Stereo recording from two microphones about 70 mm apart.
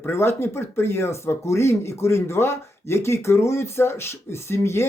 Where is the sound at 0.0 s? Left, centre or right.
Left.